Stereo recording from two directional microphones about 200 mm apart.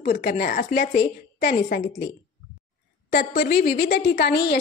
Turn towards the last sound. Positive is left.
turn(degrees=50)  # may be behind; listen again after turning